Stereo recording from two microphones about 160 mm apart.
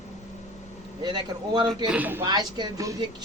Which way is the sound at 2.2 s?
25° right (ahead or behind).